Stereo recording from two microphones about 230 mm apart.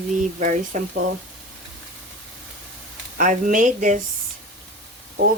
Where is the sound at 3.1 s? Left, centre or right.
Right.